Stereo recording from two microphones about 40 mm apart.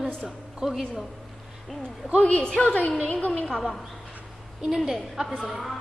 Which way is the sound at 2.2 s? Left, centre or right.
Left.